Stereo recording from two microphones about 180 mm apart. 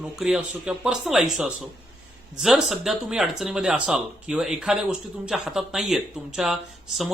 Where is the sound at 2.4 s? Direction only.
Centre (ahead or behind).